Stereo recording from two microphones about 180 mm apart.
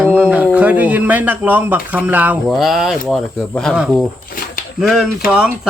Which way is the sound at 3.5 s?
5° left (ahead or behind).